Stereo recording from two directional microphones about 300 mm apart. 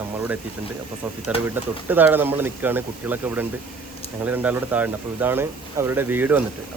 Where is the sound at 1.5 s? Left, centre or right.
Centre.